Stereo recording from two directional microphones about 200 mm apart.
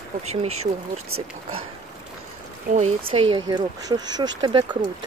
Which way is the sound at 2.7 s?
30° right (ahead or behind).